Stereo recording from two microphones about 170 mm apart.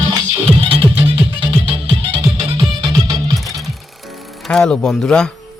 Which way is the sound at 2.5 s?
25° right (ahead or behind).